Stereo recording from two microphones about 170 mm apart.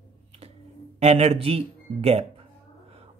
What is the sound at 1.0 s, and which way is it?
Speech, 40° right (ahead or behind).